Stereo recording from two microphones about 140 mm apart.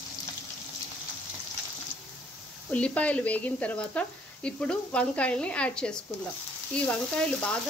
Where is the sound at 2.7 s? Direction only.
10° left (ahead or behind).